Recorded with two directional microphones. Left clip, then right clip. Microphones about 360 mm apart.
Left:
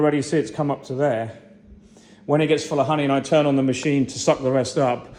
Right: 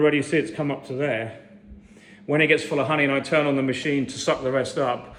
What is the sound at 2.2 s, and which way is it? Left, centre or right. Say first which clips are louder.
A man's voice: even; centre.